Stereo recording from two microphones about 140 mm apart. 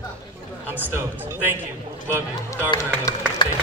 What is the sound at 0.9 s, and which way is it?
Speech, 15° right (ahead or behind).